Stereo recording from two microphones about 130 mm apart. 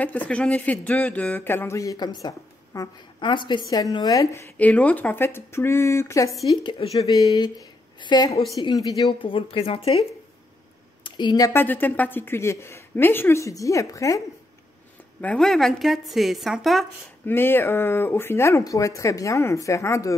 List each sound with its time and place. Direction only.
0.0 s a woman's voice: 10° left (ahead or behind)
3.2 s speech: 35° left (ahead or behind)
7.0 s speech: 25° left (ahead or behind)
9.0 s speech: 45° left (ahead or behind)
11.1 s speech: 35° left (ahead or behind)
11.5 s speech: 15° left (ahead or behind)
15.1 s a woman's voice: 10° left (ahead or behind)
17.3 s speech: 15° left (ahead or behind)